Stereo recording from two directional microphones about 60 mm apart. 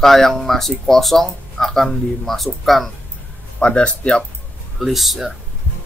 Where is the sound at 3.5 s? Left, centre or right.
Centre.